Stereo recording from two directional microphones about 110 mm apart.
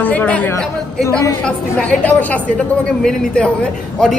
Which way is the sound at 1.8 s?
10° left (ahead or behind).